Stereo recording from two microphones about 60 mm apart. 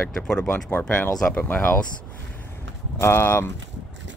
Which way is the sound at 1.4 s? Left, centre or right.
Left.